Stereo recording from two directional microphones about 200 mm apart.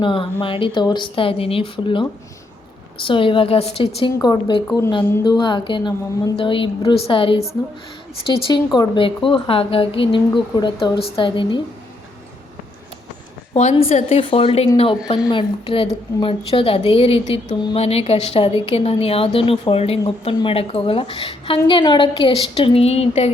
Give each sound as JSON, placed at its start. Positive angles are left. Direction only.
{"t": 0.0, "sound": "a woman's voice", "side_deg": 25}
{"t": 13.5, "sound": "a woman's voice", "side_deg": 35}